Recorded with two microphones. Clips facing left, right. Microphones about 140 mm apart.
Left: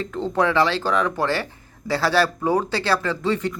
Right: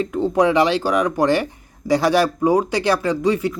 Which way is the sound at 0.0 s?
15° right (ahead or behind).